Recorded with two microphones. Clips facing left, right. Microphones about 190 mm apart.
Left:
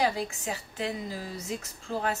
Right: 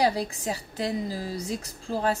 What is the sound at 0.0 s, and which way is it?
Speech, 35° right (ahead or behind).